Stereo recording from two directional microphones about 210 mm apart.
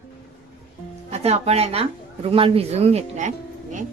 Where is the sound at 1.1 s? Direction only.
30° right (ahead or behind).